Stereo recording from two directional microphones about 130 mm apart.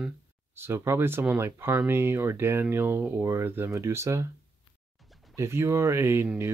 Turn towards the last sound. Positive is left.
turn(degrees=-20)  # may be behind; listen again after turning